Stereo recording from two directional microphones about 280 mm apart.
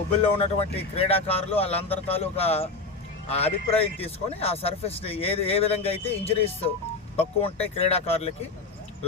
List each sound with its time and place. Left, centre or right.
0.1 s speech: left